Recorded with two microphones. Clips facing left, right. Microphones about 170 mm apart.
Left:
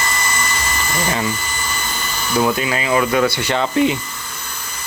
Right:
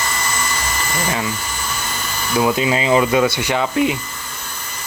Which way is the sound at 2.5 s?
20° right (ahead or behind).